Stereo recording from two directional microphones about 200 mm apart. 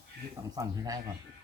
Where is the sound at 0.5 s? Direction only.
20° right (ahead or behind).